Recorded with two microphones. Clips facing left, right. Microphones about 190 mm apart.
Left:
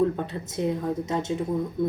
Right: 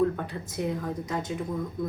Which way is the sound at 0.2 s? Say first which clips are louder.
Left 3 dB; 25° left (ahead or behind).